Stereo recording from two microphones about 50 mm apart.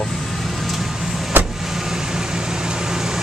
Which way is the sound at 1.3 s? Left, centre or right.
Right.